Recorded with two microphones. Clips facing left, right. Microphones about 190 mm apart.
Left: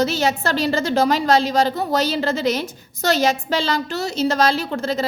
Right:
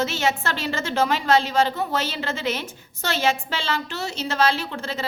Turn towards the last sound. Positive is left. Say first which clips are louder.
# left 7 dB
turn(degrees=40)  # may be behind; listen again after turning